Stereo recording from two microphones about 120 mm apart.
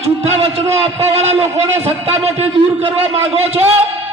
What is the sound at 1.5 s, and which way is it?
Speech, 20° right (ahead or behind).